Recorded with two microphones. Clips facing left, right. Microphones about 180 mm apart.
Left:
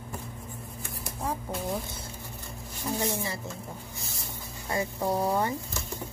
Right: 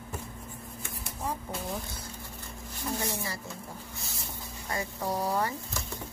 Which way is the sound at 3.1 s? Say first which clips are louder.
Left 4 dB; 20° left (ahead or behind).